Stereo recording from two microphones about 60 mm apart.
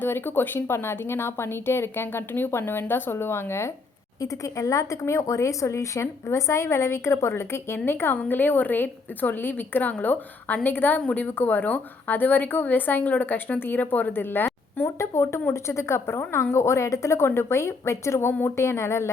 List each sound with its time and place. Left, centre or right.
0.0 s a woman's voice: left
4.2 s a woman's voice: left
14.8 s a woman's voice: left